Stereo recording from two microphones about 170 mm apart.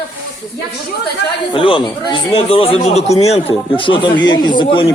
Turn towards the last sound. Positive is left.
turn(degrees=30)  # may be behind; listen again after turning